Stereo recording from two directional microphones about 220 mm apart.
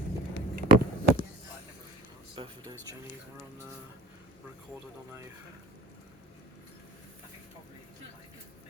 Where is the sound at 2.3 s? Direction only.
20° right (ahead or behind).